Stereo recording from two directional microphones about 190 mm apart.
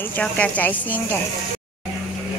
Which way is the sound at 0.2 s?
10° left (ahead or behind).